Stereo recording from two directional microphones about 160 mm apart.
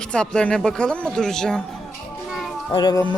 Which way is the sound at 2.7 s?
25° left (ahead or behind).